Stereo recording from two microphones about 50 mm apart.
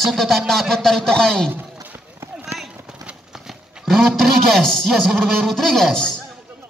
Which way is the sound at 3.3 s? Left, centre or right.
Centre.